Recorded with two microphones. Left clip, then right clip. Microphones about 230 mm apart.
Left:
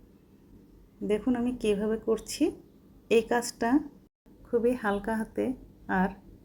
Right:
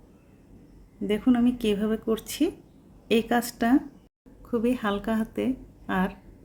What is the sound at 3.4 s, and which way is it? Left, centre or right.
Speech, centre.